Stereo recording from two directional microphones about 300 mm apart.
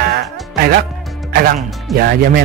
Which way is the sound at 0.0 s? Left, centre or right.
Right.